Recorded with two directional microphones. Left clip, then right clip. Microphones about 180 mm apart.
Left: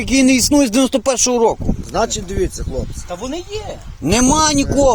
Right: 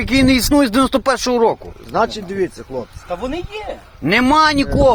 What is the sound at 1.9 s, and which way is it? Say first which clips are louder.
Speech: right 2 dB; 25° left (ahead or behind).